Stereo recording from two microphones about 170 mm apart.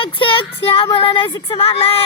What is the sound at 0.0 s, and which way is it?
Speech, 30° left (ahead or behind).